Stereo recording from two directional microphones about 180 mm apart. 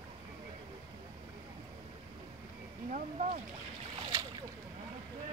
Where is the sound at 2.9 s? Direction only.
45° right (ahead or behind).